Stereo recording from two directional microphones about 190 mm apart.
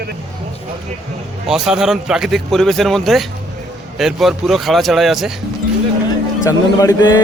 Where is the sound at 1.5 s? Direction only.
Centre (ahead or behind).